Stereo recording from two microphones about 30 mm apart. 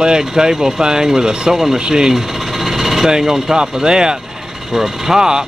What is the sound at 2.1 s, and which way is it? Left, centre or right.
Sewing machine, centre.